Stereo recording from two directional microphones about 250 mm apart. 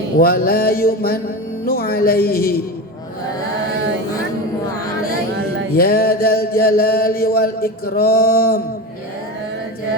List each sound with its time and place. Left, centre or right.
0.2 s mantra: left
5.7 s mantra: left